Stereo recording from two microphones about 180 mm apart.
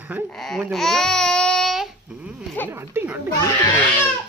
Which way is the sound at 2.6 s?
10° right (ahead or behind).